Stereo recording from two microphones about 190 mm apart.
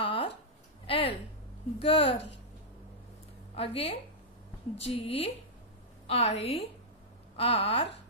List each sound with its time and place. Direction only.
0.0 s a sound: 30° left (ahead or behind)
1.8 s speech: 30° left (ahead or behind)
2.1 s a woman's voice: 70° left (ahead or behind)
3.5 s a woman's voice: 30° left (ahead or behind)